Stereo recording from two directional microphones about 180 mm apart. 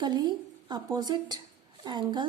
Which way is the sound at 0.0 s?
25° right (ahead or behind).